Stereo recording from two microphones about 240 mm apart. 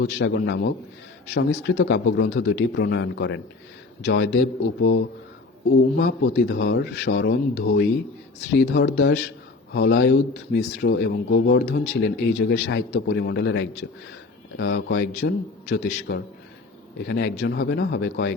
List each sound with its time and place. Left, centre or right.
0.0 s speech: left
6.1 s speech: left